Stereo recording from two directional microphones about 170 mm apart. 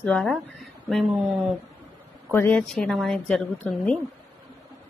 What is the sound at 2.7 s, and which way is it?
A woman's voice, centre (ahead or behind).